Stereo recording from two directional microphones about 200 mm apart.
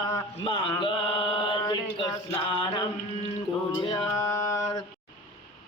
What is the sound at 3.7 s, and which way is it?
Male singing, 20° left (ahead or behind).